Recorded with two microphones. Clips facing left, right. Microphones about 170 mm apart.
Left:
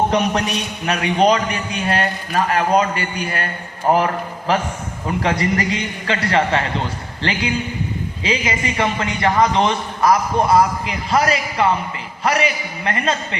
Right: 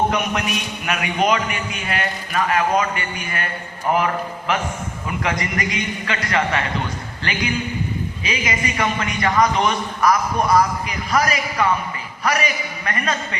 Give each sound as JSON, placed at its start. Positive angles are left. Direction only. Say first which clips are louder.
{"t": 0.9, "sound": "a man's voice", "louder": "left 4 dB", "side_deg": 35}